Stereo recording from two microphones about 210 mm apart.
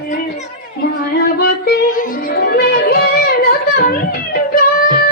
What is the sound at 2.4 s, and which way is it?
Music, 50° left (ahead or behind).